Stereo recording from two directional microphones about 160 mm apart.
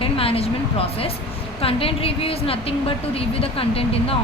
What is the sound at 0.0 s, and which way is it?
A woman's voice, 35° left (ahead or behind).